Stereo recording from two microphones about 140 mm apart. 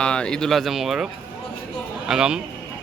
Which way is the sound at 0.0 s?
5° left (ahead or behind).